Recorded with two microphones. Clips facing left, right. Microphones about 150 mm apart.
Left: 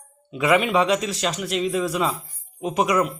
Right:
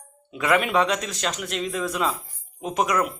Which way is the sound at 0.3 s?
Centre (ahead or behind).